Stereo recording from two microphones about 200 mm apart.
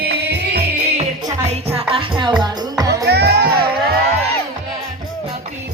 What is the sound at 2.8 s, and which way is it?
Music, 55° right (ahead or behind).